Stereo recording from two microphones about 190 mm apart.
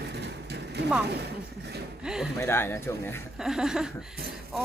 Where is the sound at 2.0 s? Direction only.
5° right (ahead or behind).